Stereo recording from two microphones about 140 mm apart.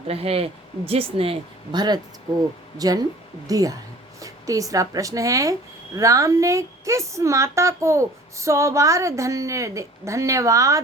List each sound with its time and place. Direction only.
0.1 s a woman's voice: 45° right (ahead or behind); by 10.8 s 25° right (ahead or behind)